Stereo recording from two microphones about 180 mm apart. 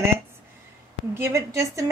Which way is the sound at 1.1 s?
15° right (ahead or behind).